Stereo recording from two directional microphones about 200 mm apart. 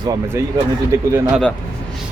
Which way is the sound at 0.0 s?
15° right (ahead or behind).